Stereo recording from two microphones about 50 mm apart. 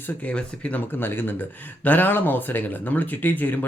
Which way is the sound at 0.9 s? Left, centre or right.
Left.